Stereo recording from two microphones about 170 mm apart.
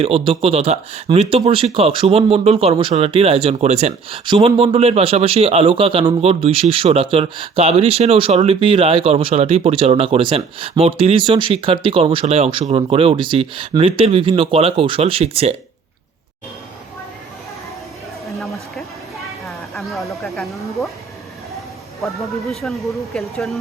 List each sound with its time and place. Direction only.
0.0 s speech: 35° right (ahead or behind)
19.7 s a sound: centre (ahead or behind)
22.0 s a man's voice: centre (ahead or behind)